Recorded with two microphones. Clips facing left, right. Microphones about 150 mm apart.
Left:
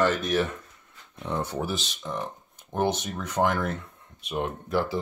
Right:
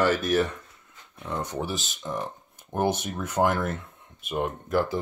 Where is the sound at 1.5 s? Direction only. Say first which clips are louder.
Left 1 dB; centre (ahead or behind).